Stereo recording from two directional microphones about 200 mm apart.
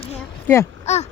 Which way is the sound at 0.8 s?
35° left (ahead or behind).